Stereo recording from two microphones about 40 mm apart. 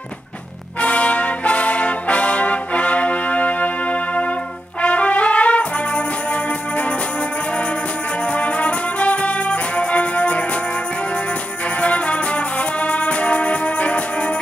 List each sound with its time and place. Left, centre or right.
0.7 s brass instrument: left
8.3 s music: left
11.8 s music: left